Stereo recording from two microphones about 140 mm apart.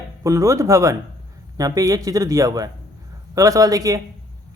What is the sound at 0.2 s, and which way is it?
Speech, 20° right (ahead or behind).